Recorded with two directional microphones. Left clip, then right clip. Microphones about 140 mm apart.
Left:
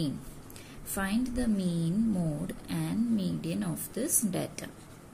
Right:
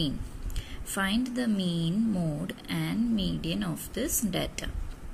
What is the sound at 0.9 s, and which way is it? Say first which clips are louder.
Speech: right 3 dB; 15° right (ahead or behind).